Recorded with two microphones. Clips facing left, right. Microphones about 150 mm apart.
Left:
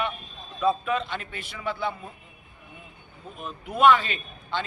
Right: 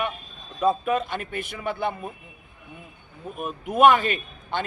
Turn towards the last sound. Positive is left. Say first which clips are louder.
# right 2 dB
turn(degrees=-50)  # may be behind; listen again after turning